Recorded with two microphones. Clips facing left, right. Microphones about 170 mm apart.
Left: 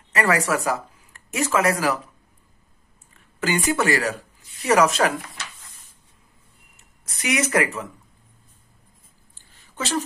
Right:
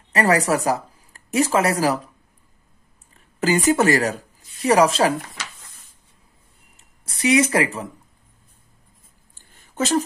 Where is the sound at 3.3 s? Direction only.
35° right (ahead or behind).